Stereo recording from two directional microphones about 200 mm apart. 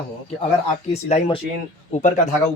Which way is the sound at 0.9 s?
30° left (ahead or behind).